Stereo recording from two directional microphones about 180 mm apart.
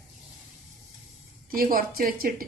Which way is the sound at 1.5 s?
55° right (ahead or behind).